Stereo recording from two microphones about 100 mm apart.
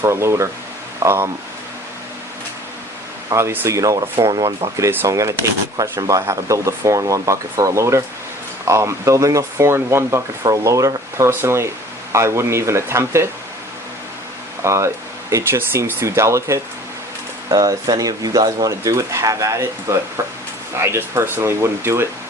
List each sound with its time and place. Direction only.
0.0 s speech: 30° right (ahead or behind)
3.2 s speech: 30° right (ahead or behind)
14.6 s speech: 30° right (ahead or behind)